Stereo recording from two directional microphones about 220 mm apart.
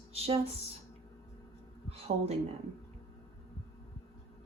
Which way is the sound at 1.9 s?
25° right (ahead or behind).